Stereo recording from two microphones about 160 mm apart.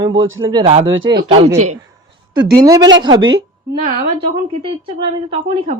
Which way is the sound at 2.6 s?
25° right (ahead or behind).